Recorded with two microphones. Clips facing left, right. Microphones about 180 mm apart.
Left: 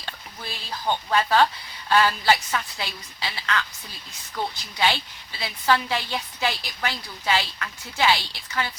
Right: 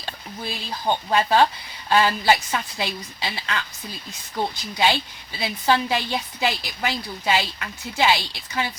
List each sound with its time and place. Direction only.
0.9 s a woman's voice: 25° right (ahead or behind)